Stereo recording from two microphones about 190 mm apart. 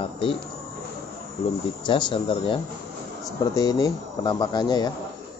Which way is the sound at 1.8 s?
25° left (ahead or behind).